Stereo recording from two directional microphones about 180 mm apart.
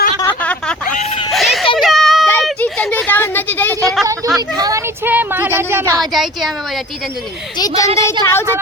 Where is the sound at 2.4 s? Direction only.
5° left (ahead or behind).